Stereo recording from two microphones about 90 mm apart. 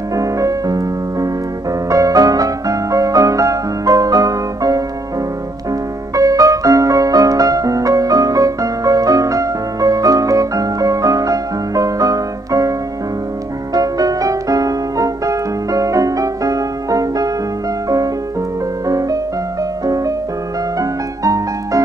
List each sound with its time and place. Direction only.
0.1 s music: 40° right (ahead or behind)
6.1 s music: 40° right (ahead or behind)
13.7 s music: 45° right (ahead or behind)
18.9 s music: 40° right (ahead or behind)
21.2 s music: 40° right (ahead or behind)